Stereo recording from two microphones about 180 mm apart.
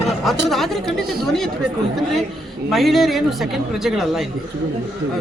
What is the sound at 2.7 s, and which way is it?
Speech, centre (ahead or behind).